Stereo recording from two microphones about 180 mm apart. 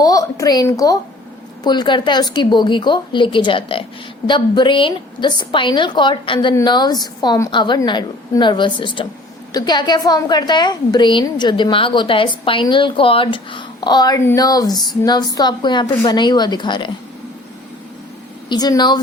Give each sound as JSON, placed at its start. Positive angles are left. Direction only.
{"t": 0.0, "sound": "a woman's voice", "side_deg": 20}
{"t": 18.4, "sound": "a woman's voice", "side_deg": 20}